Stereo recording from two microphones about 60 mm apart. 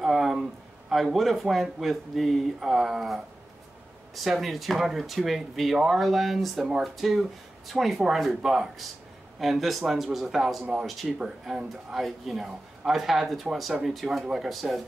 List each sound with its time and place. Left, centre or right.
0.0 s speech: centre